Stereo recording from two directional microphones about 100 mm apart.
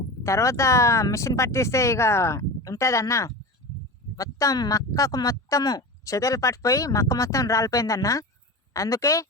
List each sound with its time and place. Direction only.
0.2 s speech: 30° left (ahead or behind)